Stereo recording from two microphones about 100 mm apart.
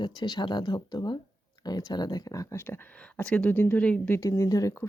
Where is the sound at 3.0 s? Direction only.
15° left (ahead or behind).